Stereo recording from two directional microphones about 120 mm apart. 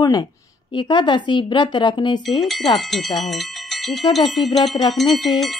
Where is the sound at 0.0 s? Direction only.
35° left (ahead or behind).